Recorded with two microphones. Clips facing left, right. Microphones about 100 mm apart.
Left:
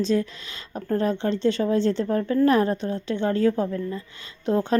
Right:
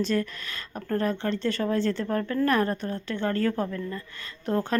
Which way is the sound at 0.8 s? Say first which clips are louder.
Left 3 dB; 25° left (ahead or behind).